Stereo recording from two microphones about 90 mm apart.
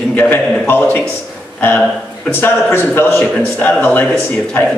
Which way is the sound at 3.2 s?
10° left (ahead or behind).